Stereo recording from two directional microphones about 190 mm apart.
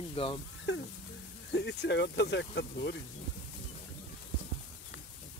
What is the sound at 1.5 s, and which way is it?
Speech, 65° left (ahead or behind).